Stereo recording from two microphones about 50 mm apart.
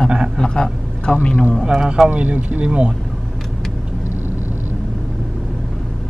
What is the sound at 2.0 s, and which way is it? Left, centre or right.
Speech, right.